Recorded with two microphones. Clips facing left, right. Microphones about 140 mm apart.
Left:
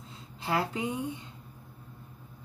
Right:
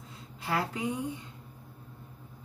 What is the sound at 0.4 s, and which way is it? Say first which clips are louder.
Speech: left 2 dB; 25° left (ahead or behind).